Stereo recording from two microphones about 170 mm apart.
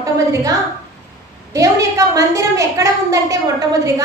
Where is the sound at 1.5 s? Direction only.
20° right (ahead or behind).